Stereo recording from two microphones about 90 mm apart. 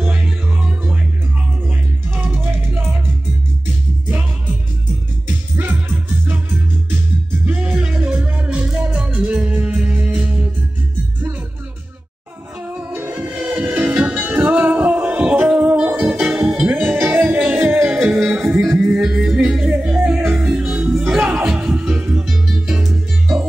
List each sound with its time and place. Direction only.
0.0 s music: 20° right (ahead or behind)
5.6 s music: 20° right (ahead or behind)
7.4 s music: 10° right (ahead or behind)
12.7 s music: 20° right (ahead or behind)
17.7 s music: centre (ahead or behind)
22.2 s music: centre (ahead or behind)